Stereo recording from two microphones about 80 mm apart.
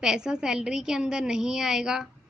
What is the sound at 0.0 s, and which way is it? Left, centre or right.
A woman's voice, centre.